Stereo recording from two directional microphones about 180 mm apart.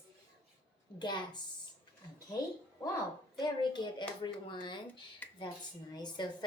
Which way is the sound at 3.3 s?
25° left (ahead or behind).